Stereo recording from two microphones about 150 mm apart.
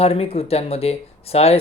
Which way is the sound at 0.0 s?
40° left (ahead or behind).